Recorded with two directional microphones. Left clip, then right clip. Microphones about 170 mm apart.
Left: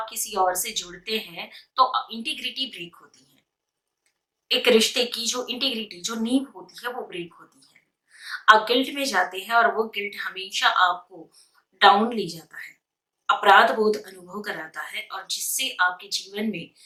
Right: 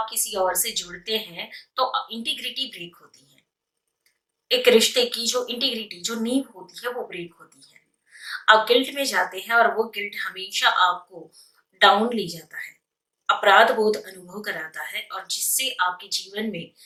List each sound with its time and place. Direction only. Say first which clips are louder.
0.0 s a woman's voice: even; 20° left (ahead or behind)
4.4 s a woman's voice: right 2 dB; 20° left (ahead or behind)
8.4 s a woman's voice: even; 15° left (ahead or behind)